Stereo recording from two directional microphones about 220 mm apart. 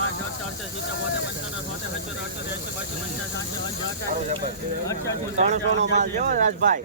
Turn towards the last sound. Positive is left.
turn(degrees=-35)  # may be behind; listen again after turning